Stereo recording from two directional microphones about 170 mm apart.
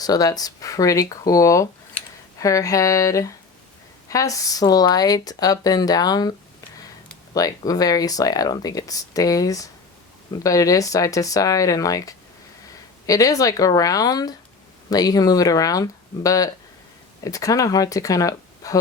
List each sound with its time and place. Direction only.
0.0 s speech: 20° left (ahead or behind)
7.3 s speech: 20° left (ahead or behind)